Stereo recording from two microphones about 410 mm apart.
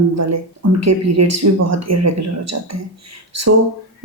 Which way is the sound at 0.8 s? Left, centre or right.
Right.